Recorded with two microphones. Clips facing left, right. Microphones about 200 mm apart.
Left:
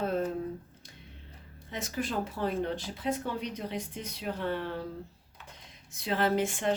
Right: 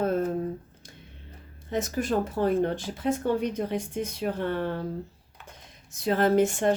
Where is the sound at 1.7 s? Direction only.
45° right (ahead or behind).